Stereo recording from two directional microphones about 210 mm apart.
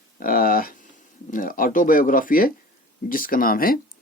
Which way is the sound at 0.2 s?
45° left (ahead or behind).